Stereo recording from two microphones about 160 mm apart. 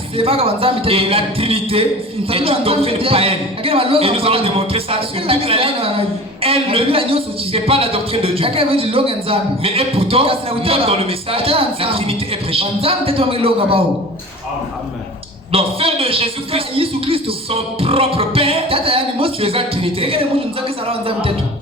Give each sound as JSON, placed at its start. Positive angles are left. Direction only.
{"t": 0.2, "sound": "a man's voice", "side_deg": -35}
{"t": 15.5, "sound": "a man's voice", "side_deg": -35}